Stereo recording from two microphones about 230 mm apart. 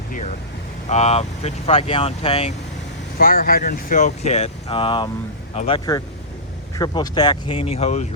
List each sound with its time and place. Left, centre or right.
0.1 s speech: left
3.2 s speech: left